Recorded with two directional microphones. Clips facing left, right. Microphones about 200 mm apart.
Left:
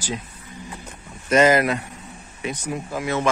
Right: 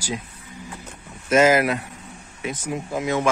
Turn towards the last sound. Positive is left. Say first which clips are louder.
# right 1 dB
turn(degrees=-15)  # may be behind; listen again after turning